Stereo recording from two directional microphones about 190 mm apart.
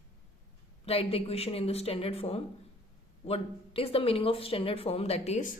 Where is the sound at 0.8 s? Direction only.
30° left (ahead or behind).